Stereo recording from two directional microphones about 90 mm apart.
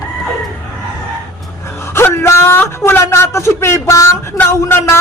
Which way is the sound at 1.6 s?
30° left (ahead or behind).